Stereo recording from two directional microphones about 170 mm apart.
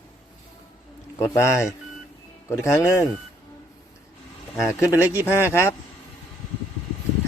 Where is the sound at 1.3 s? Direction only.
15° left (ahead or behind).